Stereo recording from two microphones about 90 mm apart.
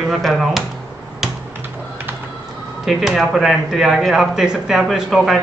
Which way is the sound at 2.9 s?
Centre (ahead or behind).